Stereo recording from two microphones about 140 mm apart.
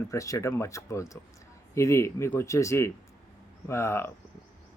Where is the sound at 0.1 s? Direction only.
25° left (ahead or behind).